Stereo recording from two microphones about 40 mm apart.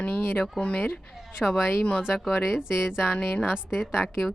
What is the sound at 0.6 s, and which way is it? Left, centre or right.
Speech, left.